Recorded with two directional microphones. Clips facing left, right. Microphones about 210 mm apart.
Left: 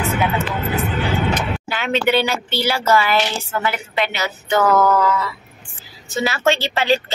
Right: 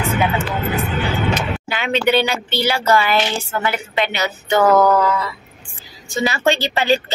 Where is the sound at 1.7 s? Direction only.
Centre (ahead or behind).